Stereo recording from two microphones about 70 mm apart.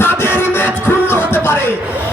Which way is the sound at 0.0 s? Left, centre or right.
Left.